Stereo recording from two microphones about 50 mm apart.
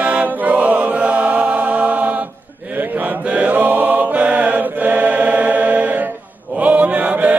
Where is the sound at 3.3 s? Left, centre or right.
Right.